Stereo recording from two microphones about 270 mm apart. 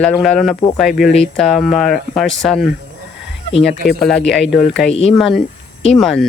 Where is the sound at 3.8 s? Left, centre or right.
Centre.